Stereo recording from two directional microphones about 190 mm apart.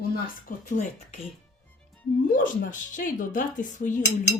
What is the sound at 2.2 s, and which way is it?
Speech, 45° left (ahead or behind).